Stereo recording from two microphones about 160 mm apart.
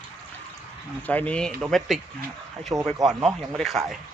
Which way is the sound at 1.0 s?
10° left (ahead or behind).